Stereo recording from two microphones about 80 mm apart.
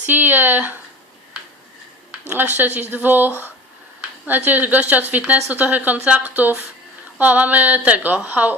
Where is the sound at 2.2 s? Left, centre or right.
Right.